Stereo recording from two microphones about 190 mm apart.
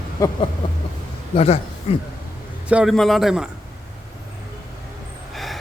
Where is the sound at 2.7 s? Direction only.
5° right (ahead or behind).